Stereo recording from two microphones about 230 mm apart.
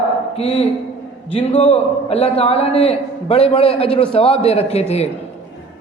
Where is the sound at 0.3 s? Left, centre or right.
Left.